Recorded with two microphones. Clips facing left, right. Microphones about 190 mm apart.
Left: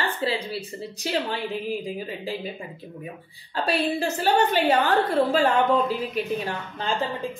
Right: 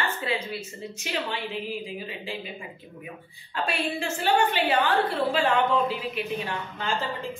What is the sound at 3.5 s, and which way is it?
A woman's voice, 35° left (ahead or behind).